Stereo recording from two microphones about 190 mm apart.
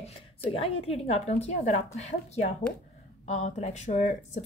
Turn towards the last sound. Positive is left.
turn(degrees=35)  # may be behind; listen again after turning